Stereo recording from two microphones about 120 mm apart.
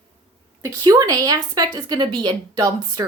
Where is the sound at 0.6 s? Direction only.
30° right (ahead or behind).